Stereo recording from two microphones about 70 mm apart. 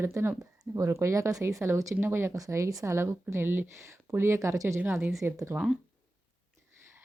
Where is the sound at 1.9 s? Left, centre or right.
Right.